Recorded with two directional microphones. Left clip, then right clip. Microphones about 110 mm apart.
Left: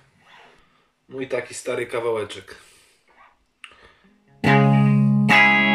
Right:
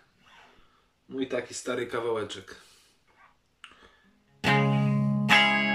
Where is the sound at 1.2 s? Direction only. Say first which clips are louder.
Left 5 dB; 20° right (ahead or behind).